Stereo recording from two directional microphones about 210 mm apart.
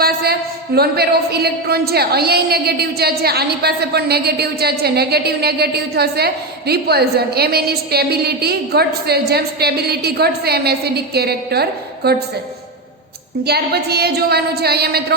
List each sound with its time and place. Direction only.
0.0 s a woman's voice: 45° right (ahead or behind)
13.4 s a woman's voice: 50° right (ahead or behind)